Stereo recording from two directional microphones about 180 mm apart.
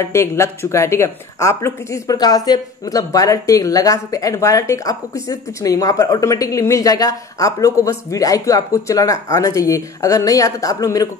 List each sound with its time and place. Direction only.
0.0 s speech: 15° left (ahead or behind)